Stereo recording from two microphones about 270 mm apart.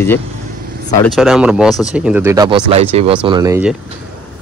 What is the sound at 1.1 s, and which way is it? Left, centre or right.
Speech, centre.